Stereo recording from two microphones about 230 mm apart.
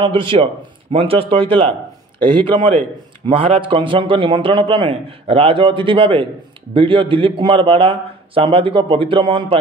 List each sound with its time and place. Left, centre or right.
0.0 s a man's voice: right